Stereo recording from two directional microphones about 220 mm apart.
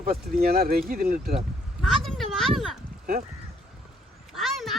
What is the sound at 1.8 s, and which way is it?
Speech, centre (ahead or behind).